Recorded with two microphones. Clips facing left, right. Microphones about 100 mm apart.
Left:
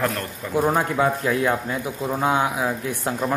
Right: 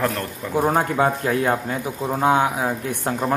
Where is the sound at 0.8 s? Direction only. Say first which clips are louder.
Right 1 dB; 40° right (ahead or behind).